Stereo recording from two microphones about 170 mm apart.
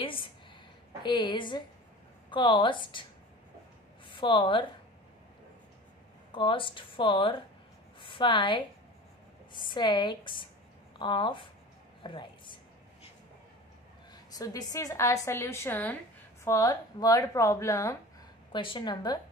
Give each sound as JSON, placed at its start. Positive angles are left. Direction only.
{"t": 0.0, "sound": "a sound", "side_deg": 30}
{"t": 1.0, "sound": "a woman's voice", "side_deg": 25}
{"t": 4.1, "sound": "a woman's voice", "side_deg": 30}
{"t": 6.3, "sound": "a woman's voice", "side_deg": 30}
{"t": 14.1, "sound": "a woman's voice", "side_deg": 20}
{"t": 16.4, "sound": "a woman's voice", "side_deg": 20}
{"t": 18.5, "sound": "a woman's voice", "side_deg": 30}